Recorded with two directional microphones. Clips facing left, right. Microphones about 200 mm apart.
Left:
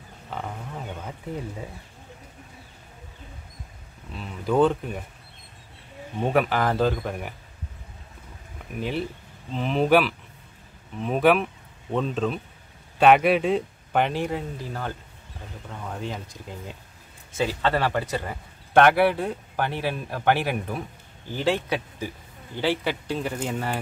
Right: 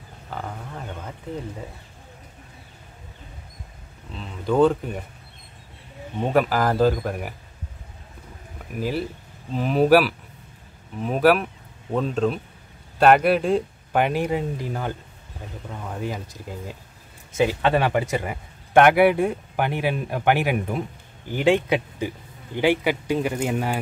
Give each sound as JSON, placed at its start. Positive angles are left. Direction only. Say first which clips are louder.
{"t": 0.3, "sound": "a sound", "louder": "even", "side_deg": 5}
{"t": 4.1, "sound": "speech", "louder": "right 1 dB", "side_deg": 5}
{"t": 6.3, "sound": "speech", "louder": "right 3 dB", "side_deg": 0}
{"t": 8.7, "sound": "speech", "louder": "right 2 dB", "side_deg": -5}